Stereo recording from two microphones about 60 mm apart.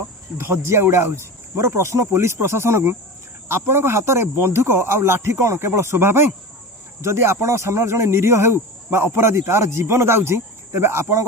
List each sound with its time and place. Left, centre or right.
0.3 s speech: centre
0.7 s speech: right